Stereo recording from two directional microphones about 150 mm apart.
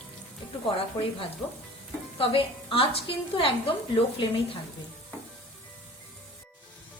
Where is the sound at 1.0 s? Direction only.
20° left (ahead or behind).